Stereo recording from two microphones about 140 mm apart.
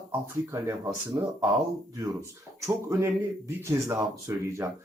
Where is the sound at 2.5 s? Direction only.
20° right (ahead or behind).